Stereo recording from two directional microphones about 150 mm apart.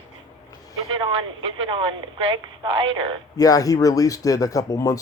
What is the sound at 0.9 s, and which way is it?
A woman's voice, 35° right (ahead or behind).